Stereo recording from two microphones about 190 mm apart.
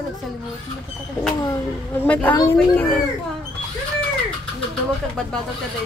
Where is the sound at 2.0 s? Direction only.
10° left (ahead or behind).